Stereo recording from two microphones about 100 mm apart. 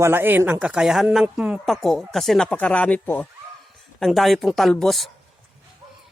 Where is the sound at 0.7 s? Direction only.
5° right (ahead or behind).